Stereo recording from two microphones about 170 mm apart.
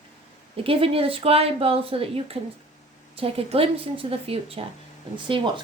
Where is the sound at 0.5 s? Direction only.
35° right (ahead or behind).